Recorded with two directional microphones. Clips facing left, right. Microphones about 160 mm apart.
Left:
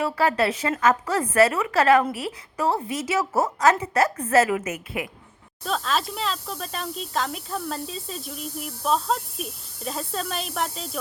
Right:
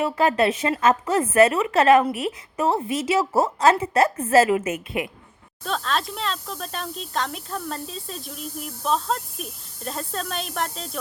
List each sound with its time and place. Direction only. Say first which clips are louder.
0.0 s a woman's voice: right 2 dB; 20° right (ahead or behind)
5.6 s speech: even; centre (ahead or behind)